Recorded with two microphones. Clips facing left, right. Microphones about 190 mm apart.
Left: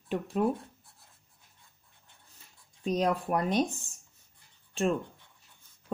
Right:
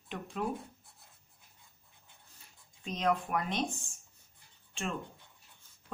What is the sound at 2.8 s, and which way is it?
Speech, 35° left (ahead or behind).